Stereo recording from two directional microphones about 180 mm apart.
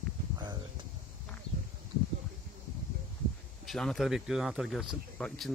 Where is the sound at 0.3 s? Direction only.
20° right (ahead or behind).